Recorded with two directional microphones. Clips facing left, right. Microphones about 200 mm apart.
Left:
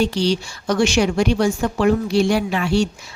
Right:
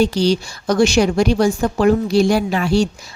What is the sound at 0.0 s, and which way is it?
A woman's voice, 40° right (ahead or behind).